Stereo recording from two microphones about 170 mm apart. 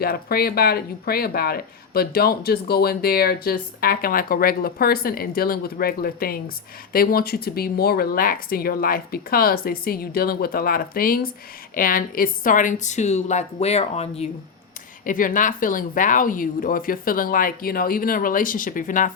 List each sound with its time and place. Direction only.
0.0 s a woman's voice: 65° left (ahead or behind); by 14.3 s 40° left (ahead or behind)
15.0 s a woman's voice: 50° left (ahead or behind)